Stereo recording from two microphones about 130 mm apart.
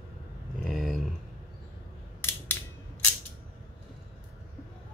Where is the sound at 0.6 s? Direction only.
Centre (ahead or behind).